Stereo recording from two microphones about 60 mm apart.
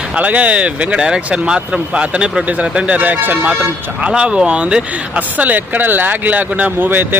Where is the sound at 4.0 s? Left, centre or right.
Centre.